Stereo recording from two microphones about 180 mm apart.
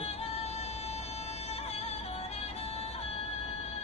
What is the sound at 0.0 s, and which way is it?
Music, 35° left (ahead or behind).